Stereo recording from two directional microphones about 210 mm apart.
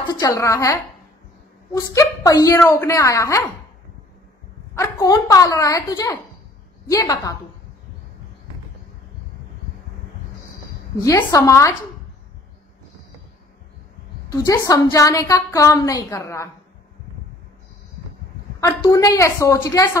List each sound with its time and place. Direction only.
0.0 s a woman's voice: 15° left (ahead or behind)
4.7 s a woman's voice: 15° left (ahead or behind)
11.0 s a woman's voice: 15° left (ahead or behind)
14.3 s a woman's voice: 15° left (ahead or behind)
18.6 s a woman's voice: 15° left (ahead or behind)